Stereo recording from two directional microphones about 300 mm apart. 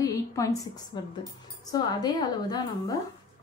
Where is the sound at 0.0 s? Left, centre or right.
Centre.